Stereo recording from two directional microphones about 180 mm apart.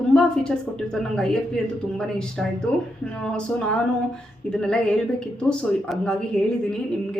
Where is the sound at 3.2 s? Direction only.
5° left (ahead or behind).